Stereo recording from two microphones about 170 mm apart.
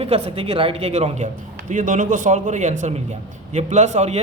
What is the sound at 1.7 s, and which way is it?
A man's voice, 50° right (ahead or behind).